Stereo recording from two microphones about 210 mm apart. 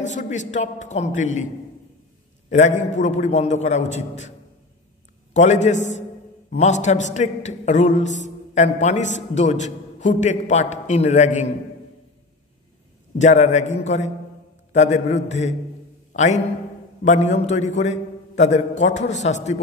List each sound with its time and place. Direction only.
0.0 s a man's voice: 35° left (ahead or behind)
2.5 s a man's voice: 35° left (ahead or behind)
5.3 s a man's voice: 35° left (ahead or behind)
13.2 s a man's voice: 35° left (ahead or behind)